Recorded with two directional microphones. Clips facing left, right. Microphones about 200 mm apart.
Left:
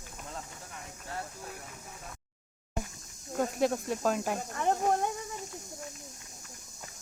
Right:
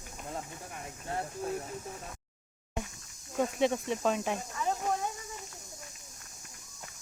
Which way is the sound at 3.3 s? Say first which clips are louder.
Even; centre (ahead or behind).